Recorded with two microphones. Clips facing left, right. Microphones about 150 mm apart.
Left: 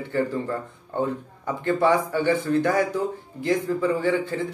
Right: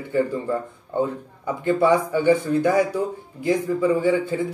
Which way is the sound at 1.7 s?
15° right (ahead or behind).